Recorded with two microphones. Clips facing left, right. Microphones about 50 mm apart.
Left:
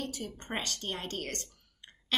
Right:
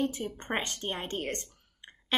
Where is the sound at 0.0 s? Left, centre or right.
Right.